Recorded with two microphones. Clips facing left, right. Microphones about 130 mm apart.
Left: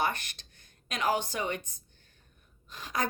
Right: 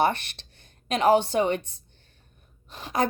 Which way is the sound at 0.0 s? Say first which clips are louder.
Right 8 dB; 25° right (ahead or behind).